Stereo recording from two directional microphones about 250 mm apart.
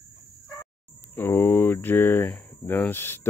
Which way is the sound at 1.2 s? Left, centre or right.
Centre.